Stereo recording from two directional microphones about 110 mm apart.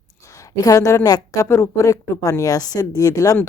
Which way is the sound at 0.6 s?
30° left (ahead or behind).